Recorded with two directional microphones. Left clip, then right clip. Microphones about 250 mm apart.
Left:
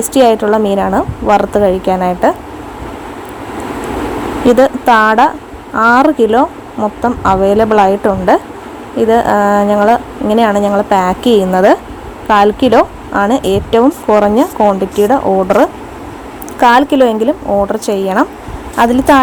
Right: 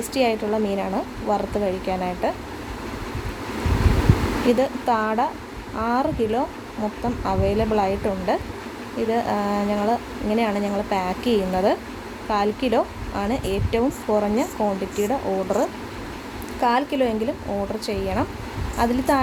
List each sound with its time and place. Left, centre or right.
0.1 s a woman's voice: left
4.6 s a woman's voice: left